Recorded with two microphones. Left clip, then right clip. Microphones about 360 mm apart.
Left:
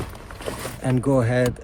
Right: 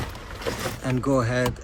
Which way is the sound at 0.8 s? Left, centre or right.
Centre.